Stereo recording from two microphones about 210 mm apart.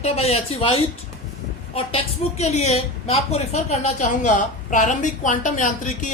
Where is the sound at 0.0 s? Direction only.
30° left (ahead or behind).